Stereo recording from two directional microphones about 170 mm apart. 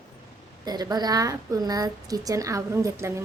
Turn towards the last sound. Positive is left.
turn(degrees=-15)  # may be behind; listen again after turning